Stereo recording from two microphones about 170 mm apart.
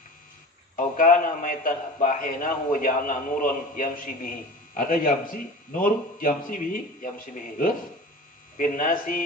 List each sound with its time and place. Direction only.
0.7 s a man's voice: 50° left (ahead or behind)